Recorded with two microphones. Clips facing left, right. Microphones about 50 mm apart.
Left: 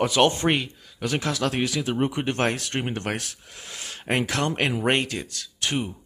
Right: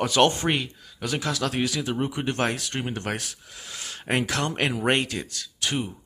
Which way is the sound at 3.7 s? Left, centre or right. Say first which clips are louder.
Even; centre.